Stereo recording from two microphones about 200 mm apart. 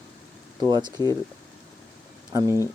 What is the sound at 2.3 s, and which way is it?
Speech, 15° right (ahead or behind).